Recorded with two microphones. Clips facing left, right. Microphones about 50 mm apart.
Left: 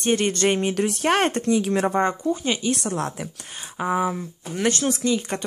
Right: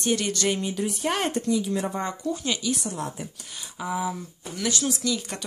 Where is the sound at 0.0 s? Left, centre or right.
Left.